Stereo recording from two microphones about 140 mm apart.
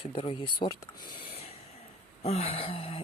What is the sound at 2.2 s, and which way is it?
Speech, 50° left (ahead or behind).